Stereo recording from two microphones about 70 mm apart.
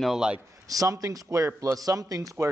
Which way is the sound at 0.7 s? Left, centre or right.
Right.